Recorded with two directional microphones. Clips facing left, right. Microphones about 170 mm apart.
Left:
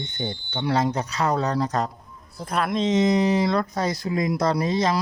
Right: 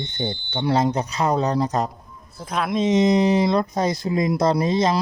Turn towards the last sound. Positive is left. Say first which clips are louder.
# right 3 dB
turn(degrees=-25)  # may be behind; listen again after turning